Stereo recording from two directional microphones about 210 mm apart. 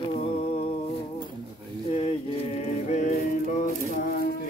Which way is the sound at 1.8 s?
25° left (ahead or behind).